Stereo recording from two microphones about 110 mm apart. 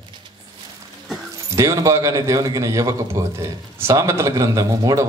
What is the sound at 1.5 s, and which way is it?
A man's voice, 30° right (ahead or behind).